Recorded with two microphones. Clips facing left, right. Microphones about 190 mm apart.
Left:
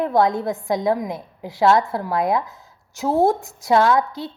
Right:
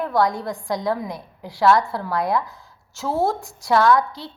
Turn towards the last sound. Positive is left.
turn(degrees=20)  # may be behind; listen again after turning